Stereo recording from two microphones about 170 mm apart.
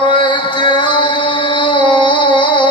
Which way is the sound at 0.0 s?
30° left (ahead or behind).